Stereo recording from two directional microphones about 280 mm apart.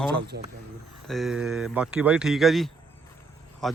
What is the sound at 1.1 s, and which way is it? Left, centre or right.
Speech, centre.